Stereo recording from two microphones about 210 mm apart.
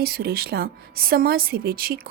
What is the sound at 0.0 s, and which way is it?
Speech, 50° right (ahead or behind).